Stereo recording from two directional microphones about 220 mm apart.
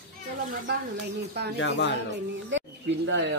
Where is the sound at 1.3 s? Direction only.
45° right (ahead or behind).